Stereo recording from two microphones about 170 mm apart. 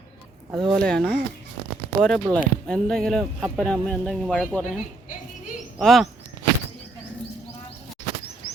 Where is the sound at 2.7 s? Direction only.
5° left (ahead or behind).